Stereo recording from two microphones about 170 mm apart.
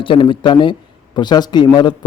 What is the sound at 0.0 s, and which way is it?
Speech, 30° left (ahead or behind).